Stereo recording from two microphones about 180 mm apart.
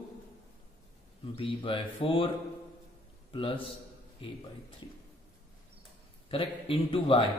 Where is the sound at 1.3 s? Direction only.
30° left (ahead or behind).